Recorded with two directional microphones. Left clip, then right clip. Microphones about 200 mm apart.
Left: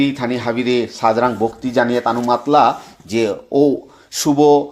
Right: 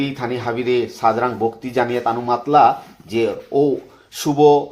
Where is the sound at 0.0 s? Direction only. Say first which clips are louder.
Left 4 dB; 45° left (ahead or behind).